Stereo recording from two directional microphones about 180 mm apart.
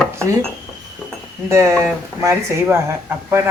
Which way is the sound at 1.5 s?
15° right (ahead or behind).